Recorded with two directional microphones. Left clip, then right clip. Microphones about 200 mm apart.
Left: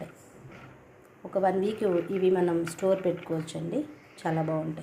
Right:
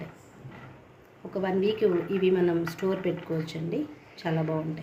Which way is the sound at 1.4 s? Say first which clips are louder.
Right 1 dB; 20° left (ahead or behind).